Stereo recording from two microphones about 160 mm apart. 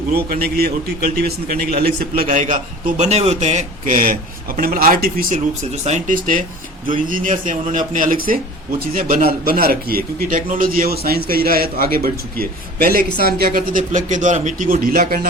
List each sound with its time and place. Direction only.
0.1 s a man's voice: 70° right (ahead or behind)
1.8 s a man's voice: 60° right (ahead or behind)
5.8 s a man's voice: 50° right (ahead or behind)